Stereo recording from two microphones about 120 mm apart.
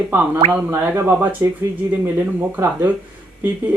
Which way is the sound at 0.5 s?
20° right (ahead or behind).